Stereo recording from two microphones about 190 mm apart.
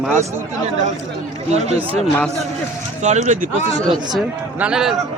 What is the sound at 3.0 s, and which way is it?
Speech, 40° right (ahead or behind).